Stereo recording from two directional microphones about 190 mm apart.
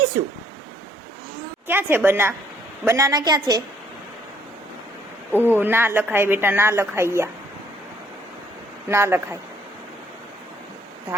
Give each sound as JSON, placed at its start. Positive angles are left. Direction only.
{"t": 0.1, "sound": "a woman's voice", "side_deg": -15}
{"t": 1.6, "sound": "a woman's voice", "side_deg": -10}
{"t": 5.5, "sound": "a woman's voice", "side_deg": -10}
{"t": 8.9, "sound": "a woman's voice", "side_deg": -15}